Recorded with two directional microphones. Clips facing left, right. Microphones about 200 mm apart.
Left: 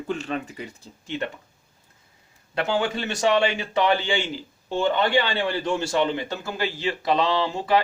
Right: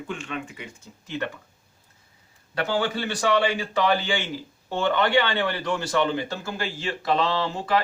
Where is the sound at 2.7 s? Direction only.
25° left (ahead or behind).